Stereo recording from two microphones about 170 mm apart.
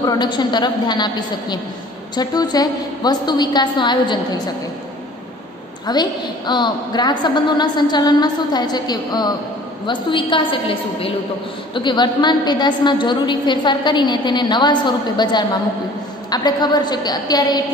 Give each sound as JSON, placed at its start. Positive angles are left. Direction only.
{"t": 0.0, "sound": "a woman's voice", "side_deg": 25}
{"t": 5.9, "sound": "a woman's voice", "side_deg": 25}